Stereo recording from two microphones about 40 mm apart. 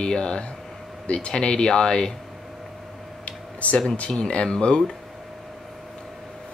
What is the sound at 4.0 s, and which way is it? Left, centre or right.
Speech, left.